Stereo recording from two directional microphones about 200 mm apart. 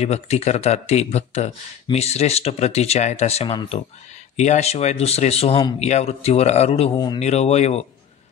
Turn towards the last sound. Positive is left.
turn(degrees=30)  # may be behind; listen again after turning